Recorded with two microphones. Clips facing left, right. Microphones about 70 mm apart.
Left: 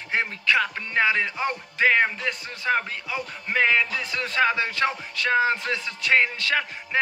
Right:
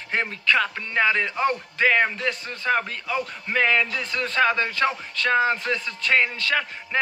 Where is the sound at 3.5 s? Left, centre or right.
Centre.